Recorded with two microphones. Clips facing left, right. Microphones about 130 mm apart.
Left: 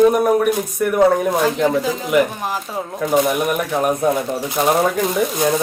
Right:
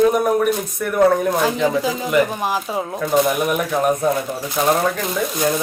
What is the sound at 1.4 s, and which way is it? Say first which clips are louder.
A man's voice: left 1 dB; 5° right (ahead or behind).